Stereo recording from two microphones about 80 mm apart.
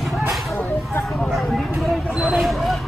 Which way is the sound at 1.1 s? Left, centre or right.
Centre.